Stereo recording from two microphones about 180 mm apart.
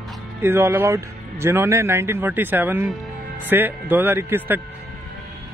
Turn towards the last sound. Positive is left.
turn(degrees=-10)  # may be behind; listen again after turning